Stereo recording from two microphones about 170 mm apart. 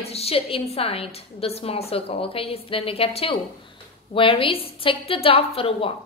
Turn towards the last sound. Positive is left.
turn(degrees=35)  # may be behind; listen again after turning